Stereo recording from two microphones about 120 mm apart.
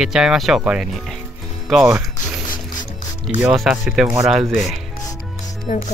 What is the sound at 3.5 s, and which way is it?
Speech, 5° right (ahead or behind).